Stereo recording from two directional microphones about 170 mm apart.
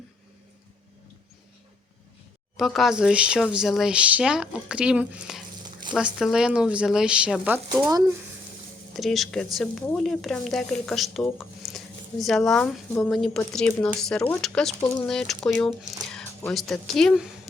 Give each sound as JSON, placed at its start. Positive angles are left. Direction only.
{"t": 2.6, "sound": "speech", "side_deg": 0}
{"t": 7.5, "sound": "speech", "side_deg": -20}
{"t": 9.0, "sound": "speech", "side_deg": 0}
{"t": 14.8, "sound": "speech", "side_deg": 25}
{"t": 15.0, "sound": "speech", "side_deg": 5}
{"t": 16.1, "sound": "music", "side_deg": 10}
{"t": 16.6, "sound": "speech", "side_deg": 0}